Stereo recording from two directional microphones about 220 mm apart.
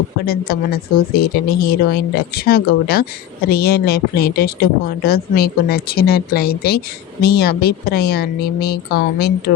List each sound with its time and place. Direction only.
0.3 s a woman's voice: 45° left (ahead or behind)